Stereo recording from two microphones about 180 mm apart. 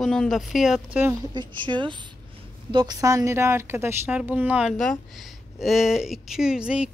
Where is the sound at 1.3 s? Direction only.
25° right (ahead or behind).